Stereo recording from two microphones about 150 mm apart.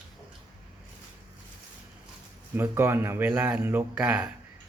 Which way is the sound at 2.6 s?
15° right (ahead or behind).